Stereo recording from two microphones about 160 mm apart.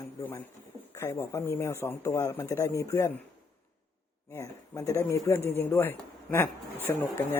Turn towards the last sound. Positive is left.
turn(degrees=15)  # may be behind; listen again after turning